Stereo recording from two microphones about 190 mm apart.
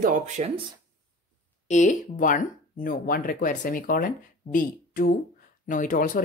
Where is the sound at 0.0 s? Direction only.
40° right (ahead or behind).